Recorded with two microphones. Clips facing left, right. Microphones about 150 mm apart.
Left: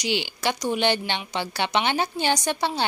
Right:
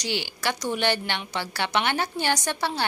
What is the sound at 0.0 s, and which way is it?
A woman's voice, 20° left (ahead or behind).